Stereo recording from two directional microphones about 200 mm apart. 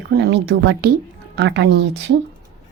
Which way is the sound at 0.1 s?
55° right (ahead or behind).